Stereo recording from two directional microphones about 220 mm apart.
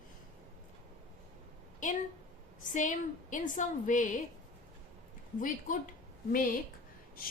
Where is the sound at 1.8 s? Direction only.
35° left (ahead or behind).